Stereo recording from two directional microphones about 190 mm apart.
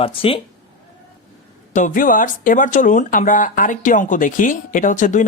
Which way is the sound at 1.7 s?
45° left (ahead or behind).